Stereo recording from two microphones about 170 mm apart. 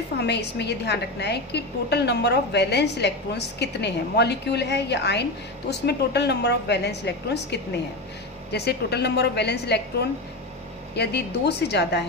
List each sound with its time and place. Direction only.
0.2 s a woman's voice: 80° left